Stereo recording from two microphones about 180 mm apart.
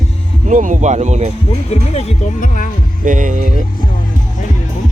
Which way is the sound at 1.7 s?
35° left (ahead or behind).